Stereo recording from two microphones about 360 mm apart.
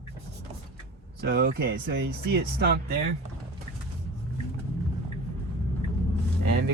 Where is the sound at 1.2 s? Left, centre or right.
Right.